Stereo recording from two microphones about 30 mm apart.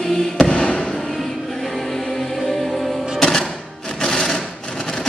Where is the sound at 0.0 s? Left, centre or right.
Centre.